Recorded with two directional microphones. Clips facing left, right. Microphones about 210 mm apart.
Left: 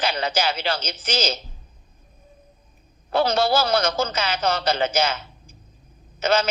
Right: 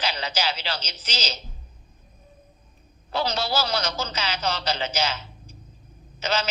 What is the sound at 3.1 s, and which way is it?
A woman's voice, 50° left (ahead or behind).